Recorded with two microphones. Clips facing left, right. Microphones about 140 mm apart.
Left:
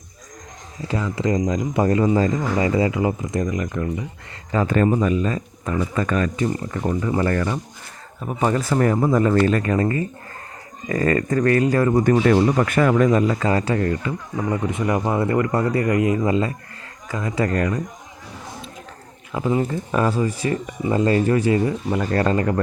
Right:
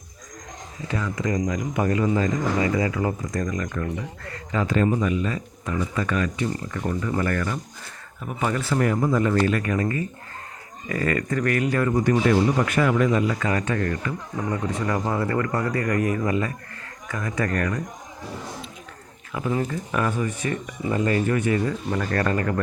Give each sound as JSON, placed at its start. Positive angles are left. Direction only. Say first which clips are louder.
{"t": 0.9, "sound": "speech", "louder": "left 4 dB", "side_deg": 25}
{"t": 4.5, "sound": "speech", "louder": "left 4 dB", "side_deg": 50}
{"t": 19.3, "sound": "speech", "louder": "left 4 dB", "side_deg": 25}